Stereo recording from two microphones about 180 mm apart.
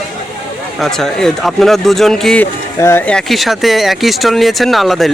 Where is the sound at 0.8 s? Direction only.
Centre (ahead or behind).